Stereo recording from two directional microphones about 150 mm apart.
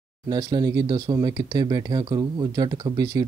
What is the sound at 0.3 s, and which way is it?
Speech, 30° right (ahead or behind).